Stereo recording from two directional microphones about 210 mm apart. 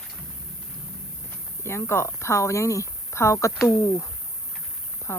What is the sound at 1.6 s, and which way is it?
Speech, 10° left (ahead or behind).